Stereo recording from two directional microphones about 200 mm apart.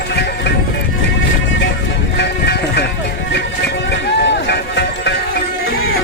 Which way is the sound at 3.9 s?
60° left (ahead or behind).